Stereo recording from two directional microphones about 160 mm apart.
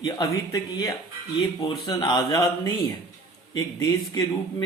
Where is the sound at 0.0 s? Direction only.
25° left (ahead or behind).